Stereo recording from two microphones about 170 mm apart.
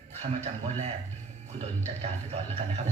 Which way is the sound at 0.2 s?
40° right (ahead or behind).